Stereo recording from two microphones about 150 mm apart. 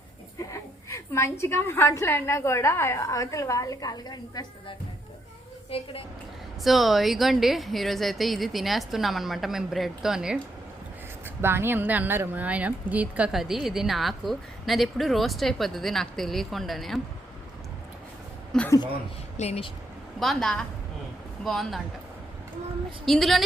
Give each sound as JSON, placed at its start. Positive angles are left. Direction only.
{"t": 0.5, "sound": "a woman's voice", "side_deg": 20}
{"t": 5.7, "sound": "a woman's voice", "side_deg": 40}
{"t": 6.7, "sound": "speech", "side_deg": 0}
{"t": 11.3, "sound": "speech", "side_deg": -15}
{"t": 18.5, "sound": "speech", "side_deg": 5}
{"t": 19.4, "sound": "speech", "side_deg": 45}
{"t": 20.1, "sound": "speech", "side_deg": 0}
{"t": 23.0, "sound": "speech", "side_deg": 0}